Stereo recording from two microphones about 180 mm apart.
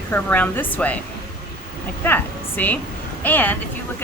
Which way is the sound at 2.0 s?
10° left (ahead or behind).